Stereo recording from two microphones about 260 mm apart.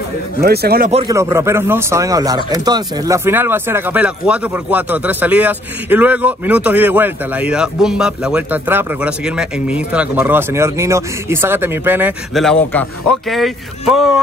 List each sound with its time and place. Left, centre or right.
0.4 s a man's voice: right
1.0 s speech: centre